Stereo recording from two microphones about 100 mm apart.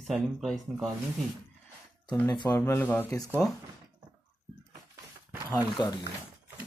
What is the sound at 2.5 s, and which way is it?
Speech, 20° left (ahead or behind).